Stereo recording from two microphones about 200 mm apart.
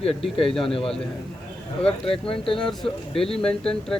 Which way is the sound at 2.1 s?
25° left (ahead or behind).